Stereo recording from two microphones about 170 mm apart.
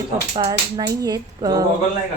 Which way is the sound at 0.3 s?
25° right (ahead or behind).